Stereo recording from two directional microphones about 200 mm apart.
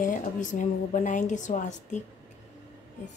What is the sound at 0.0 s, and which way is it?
A woman's voice, 40° left (ahead or behind).